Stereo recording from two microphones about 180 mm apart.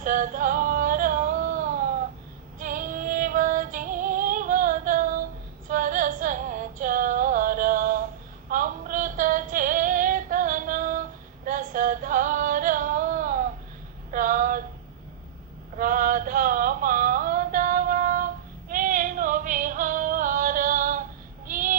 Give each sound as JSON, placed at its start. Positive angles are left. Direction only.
{"t": 0.0, "sound": "singing", "side_deg": -45}
{"t": 2.6, "sound": "music", "side_deg": -45}
{"t": 5.6, "sound": "female singing", "side_deg": -50}
{"t": 11.4, "sound": "a sound", "side_deg": -50}
{"t": 15.8, "sound": "a sound", "side_deg": -50}
{"t": 18.7, "sound": "female singing", "side_deg": -50}
{"t": 21.4, "sound": "child singing", "side_deg": -50}